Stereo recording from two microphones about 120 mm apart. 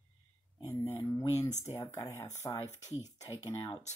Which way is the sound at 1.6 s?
25° left (ahead or behind).